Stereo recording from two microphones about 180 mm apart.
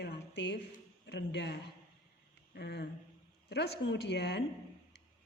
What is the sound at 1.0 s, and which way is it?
Speech, 70° left (ahead or behind).